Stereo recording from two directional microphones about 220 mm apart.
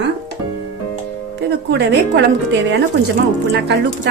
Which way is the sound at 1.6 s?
50° right (ahead or behind).